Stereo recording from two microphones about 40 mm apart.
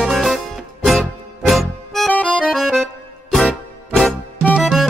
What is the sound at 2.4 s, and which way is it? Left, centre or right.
Accordion, centre.